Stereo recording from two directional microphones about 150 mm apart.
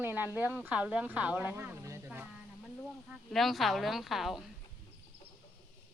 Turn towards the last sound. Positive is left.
turn(degrees=0)  # may be behind; listen again after turning